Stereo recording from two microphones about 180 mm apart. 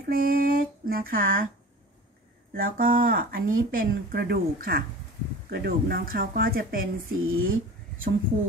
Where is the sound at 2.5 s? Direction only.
50° right (ahead or behind).